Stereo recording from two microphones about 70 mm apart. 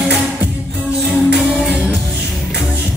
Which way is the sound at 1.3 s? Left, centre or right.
Centre.